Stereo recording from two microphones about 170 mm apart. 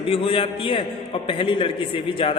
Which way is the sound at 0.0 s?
30° left (ahead or behind).